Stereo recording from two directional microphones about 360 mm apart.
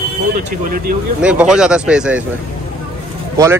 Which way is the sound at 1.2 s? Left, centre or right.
Centre.